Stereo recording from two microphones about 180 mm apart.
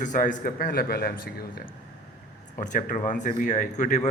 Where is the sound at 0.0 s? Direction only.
45° left (ahead or behind).